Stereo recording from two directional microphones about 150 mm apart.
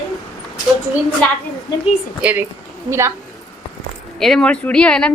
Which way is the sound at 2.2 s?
10° right (ahead or behind).